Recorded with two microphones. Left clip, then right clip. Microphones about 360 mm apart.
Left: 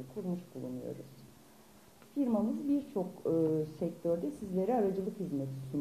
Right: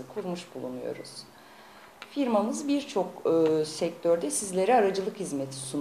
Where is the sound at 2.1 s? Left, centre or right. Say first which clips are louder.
Right 7 dB; centre.